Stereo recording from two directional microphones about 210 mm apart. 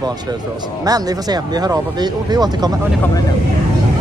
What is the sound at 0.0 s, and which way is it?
Speech, 20° right (ahead or behind).